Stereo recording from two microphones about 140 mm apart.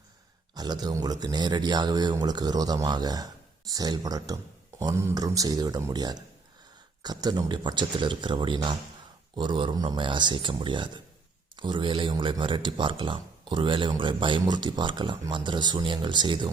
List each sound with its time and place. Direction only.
0.5 s a man's voice: 30° right (ahead or behind)